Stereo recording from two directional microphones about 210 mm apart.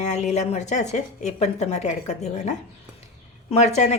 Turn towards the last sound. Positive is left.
turn(degrees=30)  # may be behind; listen again after turning